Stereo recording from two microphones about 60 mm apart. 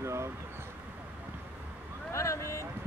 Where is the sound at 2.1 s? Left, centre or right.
Left.